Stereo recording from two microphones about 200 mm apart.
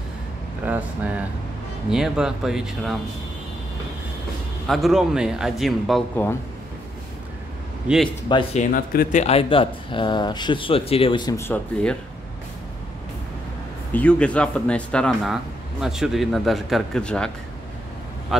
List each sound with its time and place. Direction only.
0.7 s speech: 5° right (ahead or behind)
4.6 s speech: centre (ahead or behind)
7.9 s speech: 5° right (ahead or behind)
8.3 s speech: 25° left (ahead or behind)
8.7 s speech: 40° left (ahead or behind); by 12.0 s 5° left (ahead or behind)
13.9 s speech: 5° left (ahead or behind)
18.3 s speech: centre (ahead or behind)